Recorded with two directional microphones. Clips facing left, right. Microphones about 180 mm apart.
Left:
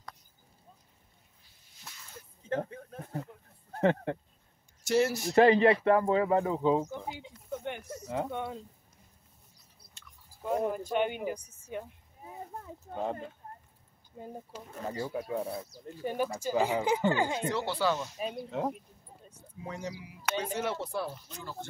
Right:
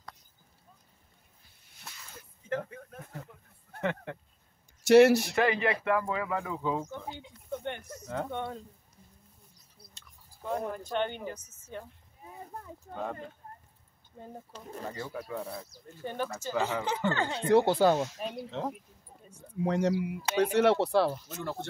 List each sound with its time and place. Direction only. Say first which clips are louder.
2.5 s a sound: left 1 dB; 30° left (ahead or behind)
3.7 s speech: left 6 dB; 35° left (ahead or behind)
4.8 s speech: right 9 dB; 70° right (ahead or behind)
5.3 s speech: left 6 dB; 35° left (ahead or behind)
6.9 s snake: left 1 dB; 10° left (ahead or behind)
8.0 s speech: left 1 dB; 10° left (ahead or behind)
10.4 s speech: left 3 dB; 10° left (ahead or behind)
12.9 s speech: left 3 dB; 25° left (ahead or behind)
14.1 s speech: left 2 dB; 10° left (ahead or behind)
14.8 s speech: left 4 dB; 25° left (ahead or behind)
15.9 s speech: left 3 dB; 10° left (ahead or behind)
17.5 s speech: right 7 dB; 50° right (ahead or behind)
18.1 s speech: left 1 dB; 5° left (ahead or behind)
19.6 s speech: right 12 dB; 70° right (ahead or behind)